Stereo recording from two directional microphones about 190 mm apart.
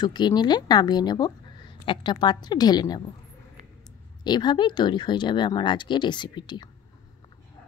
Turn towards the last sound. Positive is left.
turn(degrees=25)  # may be behind; listen again after turning